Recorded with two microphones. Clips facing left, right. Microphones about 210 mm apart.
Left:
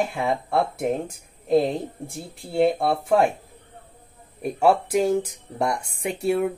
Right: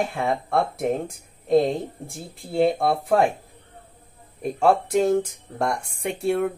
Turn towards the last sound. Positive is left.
turn(degrees=0)  # may be behind; listen again after turning